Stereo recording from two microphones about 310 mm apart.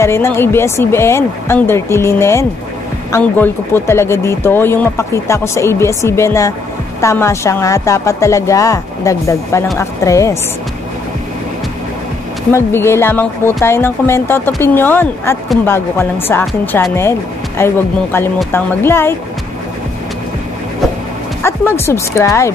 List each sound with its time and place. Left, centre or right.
0.0 s speech: centre
12.5 s speech: centre
21.4 s speech: centre